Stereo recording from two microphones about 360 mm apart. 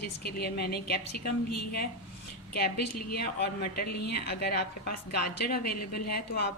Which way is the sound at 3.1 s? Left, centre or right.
Left.